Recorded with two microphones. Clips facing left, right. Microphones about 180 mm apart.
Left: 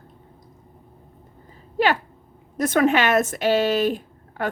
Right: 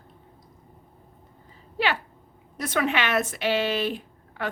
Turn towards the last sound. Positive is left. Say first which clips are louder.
# left 5 dB
turn(degrees=45)  # may be behind; listen again after turning